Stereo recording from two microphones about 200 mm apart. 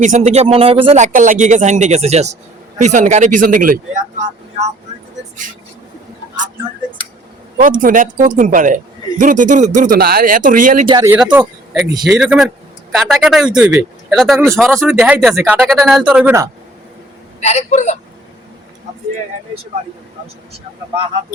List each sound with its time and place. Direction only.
0.0 s a man's voice: 40° right (ahead or behind)
1.0 s a man's voice: 40° right (ahead or behind)
7.6 s a man's voice: 45° right (ahead or behind)
10.8 s speech: 15° right (ahead or behind)
11.2 s speech: 5° right (ahead or behind)
14.7 s speech: 10° right (ahead or behind)
17.4 s a woman's voice: 35° left (ahead or behind)